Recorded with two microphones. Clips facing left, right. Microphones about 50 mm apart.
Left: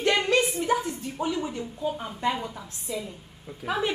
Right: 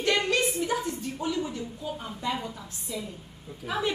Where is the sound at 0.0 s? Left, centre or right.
Centre.